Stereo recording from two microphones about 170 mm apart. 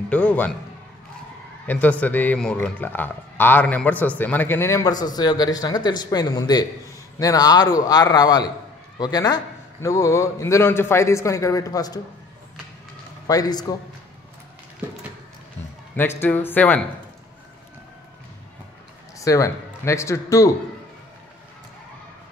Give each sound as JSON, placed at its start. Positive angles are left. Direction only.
{"t": 0.1, "sound": "speech", "side_deg": 10}
{"t": 1.7, "sound": "a man's voice", "side_deg": 10}
{"t": 13.3, "sound": "a man's voice", "side_deg": 20}
{"t": 16.0, "sound": "speech", "side_deg": 10}
{"t": 19.1, "sound": "speech", "side_deg": 20}